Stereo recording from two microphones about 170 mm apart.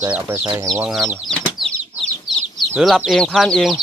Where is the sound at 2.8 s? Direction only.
Centre (ahead or behind).